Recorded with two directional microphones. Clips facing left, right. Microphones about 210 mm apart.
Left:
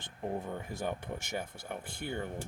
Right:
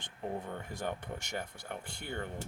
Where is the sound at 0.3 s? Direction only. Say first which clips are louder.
Left 2 dB; 10° left (ahead or behind).